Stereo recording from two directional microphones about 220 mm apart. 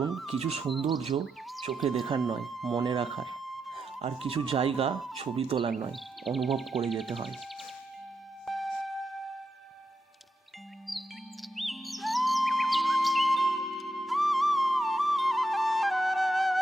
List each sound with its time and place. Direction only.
0.0 s a sound: centre (ahead or behind)
0.3 s speech: 25° right (ahead or behind)
0.9 s speech: centre (ahead or behind)
2.7 s speech: 20° right (ahead or behind)
3.4 s music: centre (ahead or behind)
4.0 s speech: 25° right (ahead or behind)
5.9 s speech: centre (ahead or behind)
8.4 s music: centre (ahead or behind)
11.5 s music: centre (ahead or behind)